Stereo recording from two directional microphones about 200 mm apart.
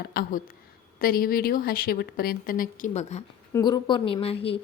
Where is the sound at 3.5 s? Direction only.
20° left (ahead or behind).